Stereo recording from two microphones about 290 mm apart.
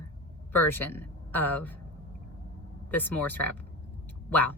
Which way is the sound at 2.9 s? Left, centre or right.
Centre.